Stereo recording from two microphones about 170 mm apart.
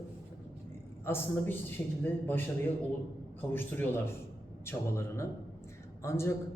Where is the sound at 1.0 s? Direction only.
15° left (ahead or behind).